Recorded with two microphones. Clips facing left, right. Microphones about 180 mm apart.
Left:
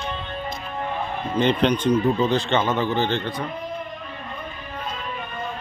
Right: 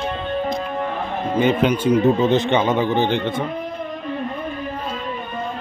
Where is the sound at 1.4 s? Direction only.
5° right (ahead or behind).